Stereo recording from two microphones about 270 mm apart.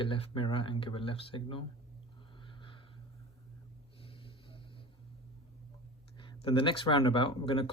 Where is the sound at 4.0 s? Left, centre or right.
Centre.